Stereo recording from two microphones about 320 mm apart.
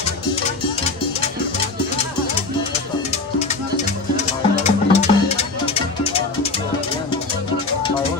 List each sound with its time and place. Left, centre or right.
3.1 s music: left